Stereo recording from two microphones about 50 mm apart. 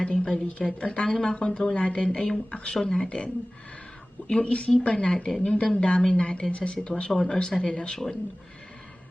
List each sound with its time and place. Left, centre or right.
0.0 s a woman's voice: centre
4.3 s a woman's voice: left
5.1 s speech: centre
5.4 s a woman's voice: left